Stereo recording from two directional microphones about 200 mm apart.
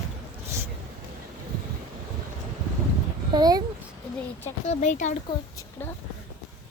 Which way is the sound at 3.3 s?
20° right (ahead or behind).